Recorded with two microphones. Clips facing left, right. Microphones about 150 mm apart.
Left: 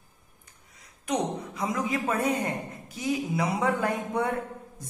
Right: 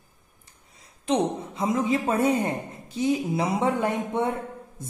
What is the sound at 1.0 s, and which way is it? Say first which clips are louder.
A woman's voice: right 4 dB; 25° right (ahead or behind).